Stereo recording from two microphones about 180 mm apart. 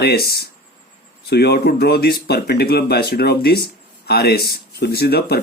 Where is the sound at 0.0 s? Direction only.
60° left (ahead or behind).